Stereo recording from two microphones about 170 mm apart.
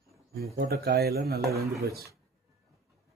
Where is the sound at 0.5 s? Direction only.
70° right (ahead or behind).